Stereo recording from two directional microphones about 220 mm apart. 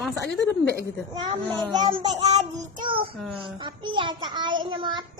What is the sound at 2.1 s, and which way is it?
A child's voice, 30° right (ahead or behind).